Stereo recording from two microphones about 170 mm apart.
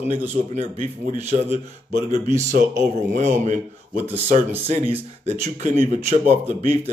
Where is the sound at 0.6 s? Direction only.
45° right (ahead or behind).